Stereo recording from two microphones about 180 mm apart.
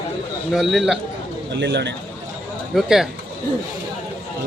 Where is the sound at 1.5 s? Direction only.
75° right (ahead or behind).